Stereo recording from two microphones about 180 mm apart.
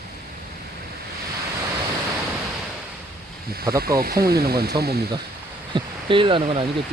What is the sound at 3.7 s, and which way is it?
Speech, 55° right (ahead or behind).